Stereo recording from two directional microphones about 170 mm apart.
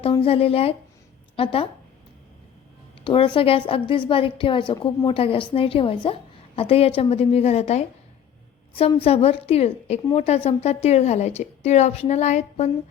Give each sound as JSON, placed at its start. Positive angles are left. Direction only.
{"t": 0.0, "sound": "a woman's voice", "side_deg": 35}
{"t": 3.0, "sound": "a woman's voice", "side_deg": 30}
{"t": 9.0, "sound": "a woman's voice", "side_deg": 35}